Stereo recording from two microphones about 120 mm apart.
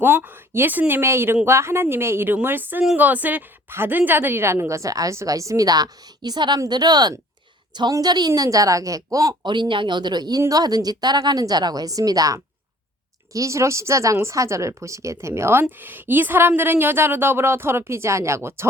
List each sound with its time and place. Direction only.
0.0 s a woman's voice: 15° right (ahead or behind)